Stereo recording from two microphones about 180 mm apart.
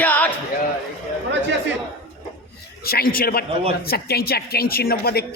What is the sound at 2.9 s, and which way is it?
A woman's voice, 55° left (ahead or behind).